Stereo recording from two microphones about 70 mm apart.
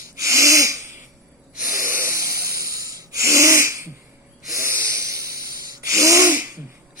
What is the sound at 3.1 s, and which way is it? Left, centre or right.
Sneeze, right.